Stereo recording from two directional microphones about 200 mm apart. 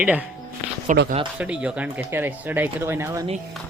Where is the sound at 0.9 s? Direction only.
40° right (ahead or behind).